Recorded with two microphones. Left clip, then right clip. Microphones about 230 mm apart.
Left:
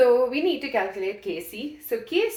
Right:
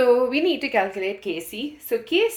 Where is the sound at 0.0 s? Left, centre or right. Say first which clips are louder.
Right 1 dB; right.